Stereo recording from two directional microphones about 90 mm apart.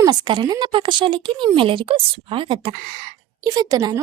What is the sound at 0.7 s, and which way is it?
Speech, 65° right (ahead or behind).